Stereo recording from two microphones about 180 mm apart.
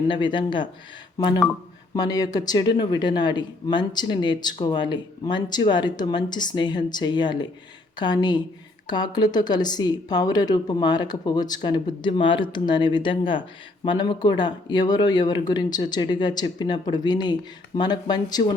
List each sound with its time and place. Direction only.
0.1 s speech: 25° left (ahead or behind)